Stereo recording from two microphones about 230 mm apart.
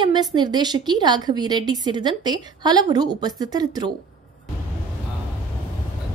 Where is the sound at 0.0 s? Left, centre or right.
Centre.